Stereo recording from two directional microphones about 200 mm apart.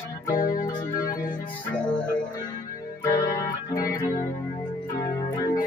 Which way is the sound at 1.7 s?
5° left (ahead or behind).